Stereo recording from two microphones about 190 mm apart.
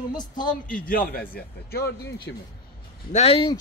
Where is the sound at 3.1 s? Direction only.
30° left (ahead or behind).